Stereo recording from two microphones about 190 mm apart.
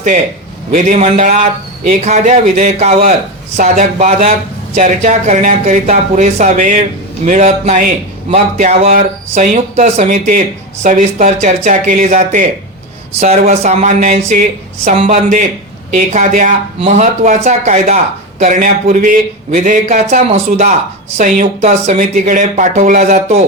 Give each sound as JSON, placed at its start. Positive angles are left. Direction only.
{"t": 0.7, "sound": "speech", "side_deg": -35}